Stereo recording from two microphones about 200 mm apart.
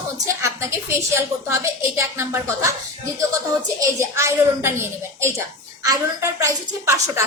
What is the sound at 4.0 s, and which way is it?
A woman's voice, 15° right (ahead or behind).